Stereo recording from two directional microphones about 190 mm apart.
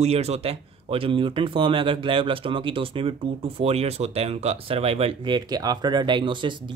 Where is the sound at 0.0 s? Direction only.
35° right (ahead or behind).